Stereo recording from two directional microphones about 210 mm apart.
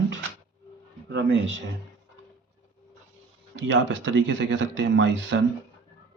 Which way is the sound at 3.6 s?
60° right (ahead or behind).